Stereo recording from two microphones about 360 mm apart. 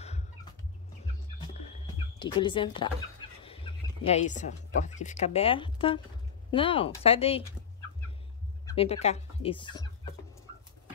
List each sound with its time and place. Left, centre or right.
2.1 s speech: centre
8.6 s speech: centre